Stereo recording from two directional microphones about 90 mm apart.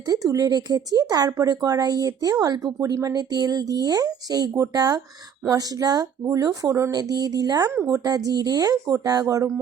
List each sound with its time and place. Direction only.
0.1 s speech: 40° right (ahead or behind)
7.0 s speech: 50° right (ahead or behind)